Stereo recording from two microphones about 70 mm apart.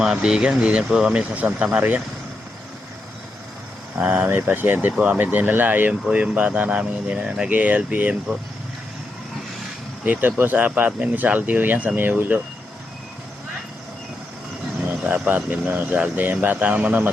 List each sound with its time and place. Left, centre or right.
0.0 s speech: centre
3.9 s speech: right
10.0 s speech: right
14.8 s a sound: right
15.4 s speech: right